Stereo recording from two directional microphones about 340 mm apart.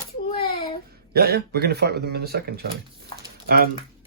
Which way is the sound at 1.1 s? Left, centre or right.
Right.